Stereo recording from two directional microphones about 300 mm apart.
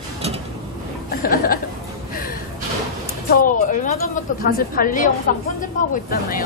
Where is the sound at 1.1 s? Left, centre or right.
Left.